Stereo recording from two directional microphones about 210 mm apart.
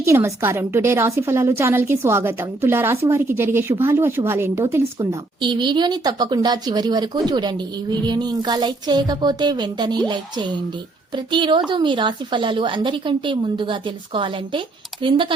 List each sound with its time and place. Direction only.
0.0 s a woman's voice: 15° right (ahead or behind)